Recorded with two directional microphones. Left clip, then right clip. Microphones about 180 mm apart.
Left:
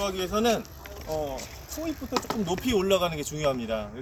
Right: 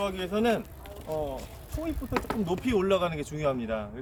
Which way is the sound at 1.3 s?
10° left (ahead or behind).